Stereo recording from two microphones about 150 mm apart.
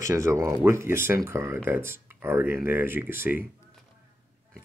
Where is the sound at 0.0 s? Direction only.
20° right (ahead or behind).